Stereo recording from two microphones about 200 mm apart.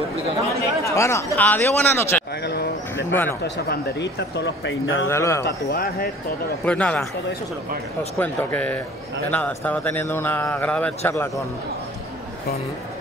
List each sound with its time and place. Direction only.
0.6 s a man's voice: 15° left (ahead or behind)
2.4 s a sound: 55° left (ahead or behind)
3.1 s a man's voice: 10° left (ahead or behind)
3.4 s speech: 55° left (ahead or behind)
5.0 s a man's voice: 15° left (ahead or behind)
5.4 s speech: 50° left (ahead or behind)
6.6 s a man's voice: 5° left (ahead or behind)
8.2 s a man's voice: 10° left (ahead or behind)